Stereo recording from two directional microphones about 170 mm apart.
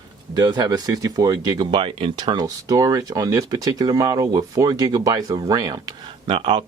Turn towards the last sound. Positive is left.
turn(degrees=-30)  # may be behind; listen again after turning